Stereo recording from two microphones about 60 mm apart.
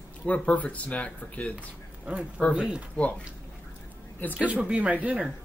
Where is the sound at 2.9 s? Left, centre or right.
Left.